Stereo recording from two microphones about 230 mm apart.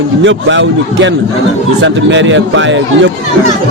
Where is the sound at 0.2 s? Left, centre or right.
Right.